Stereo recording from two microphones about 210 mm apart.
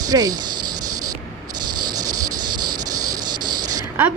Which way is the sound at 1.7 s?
20° right (ahead or behind).